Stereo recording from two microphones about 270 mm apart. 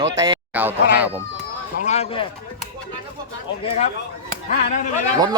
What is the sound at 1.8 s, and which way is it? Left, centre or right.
Speech, left.